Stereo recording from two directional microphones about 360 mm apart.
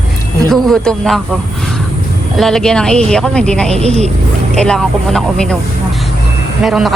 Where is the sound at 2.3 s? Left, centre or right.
Centre.